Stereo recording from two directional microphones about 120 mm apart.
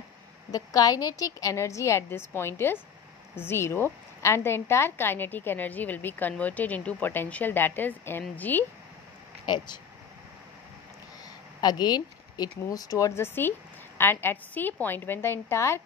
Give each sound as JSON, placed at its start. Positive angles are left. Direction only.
{"t": 0.5, "sound": "a woman's voice", "side_deg": 30}
{"t": 11.6, "sound": "speech", "side_deg": 35}